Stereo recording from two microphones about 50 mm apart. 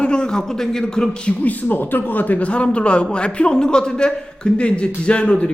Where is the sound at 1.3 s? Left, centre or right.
Left.